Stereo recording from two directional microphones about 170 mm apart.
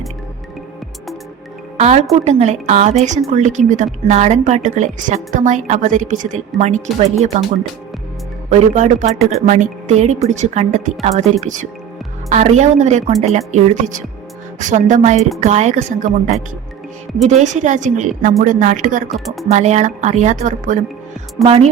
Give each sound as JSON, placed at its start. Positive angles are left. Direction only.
{"t": 1.8, "sound": "a woman's voice", "side_deg": -40}
{"t": 8.4, "sound": "a woman's voice", "side_deg": -40}
{"t": 19.1, "sound": "speech", "side_deg": 0}
{"t": 19.5, "sound": "a woman's voice", "side_deg": -40}